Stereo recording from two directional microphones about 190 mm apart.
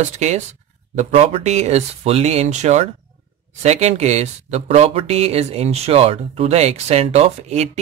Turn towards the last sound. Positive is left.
turn(degrees=-35)  # may be behind; listen again after turning